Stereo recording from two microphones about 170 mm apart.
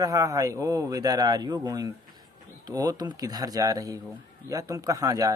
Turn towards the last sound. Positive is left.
turn(degrees=-20)  # may be behind; listen again after turning